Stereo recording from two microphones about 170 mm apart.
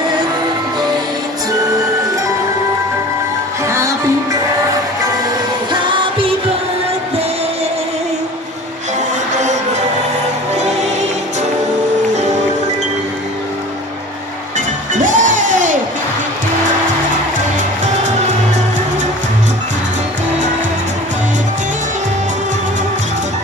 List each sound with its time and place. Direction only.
3.7 s music: 15° right (ahead or behind)
5.7 s music: 30° right (ahead or behind)
14.9 s music: 50° right (ahead or behind)